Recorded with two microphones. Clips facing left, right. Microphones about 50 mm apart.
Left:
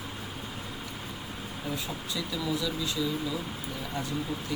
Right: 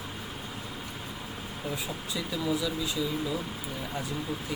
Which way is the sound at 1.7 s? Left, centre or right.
Centre.